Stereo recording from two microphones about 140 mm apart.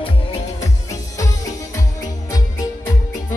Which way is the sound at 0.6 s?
25° left (ahead or behind).